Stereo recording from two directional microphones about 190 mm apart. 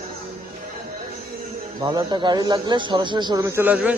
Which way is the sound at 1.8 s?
20° right (ahead or behind).